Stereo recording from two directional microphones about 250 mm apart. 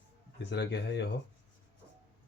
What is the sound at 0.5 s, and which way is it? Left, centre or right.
Speech, left.